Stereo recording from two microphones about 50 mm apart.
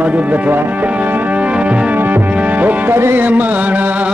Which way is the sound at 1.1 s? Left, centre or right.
Right.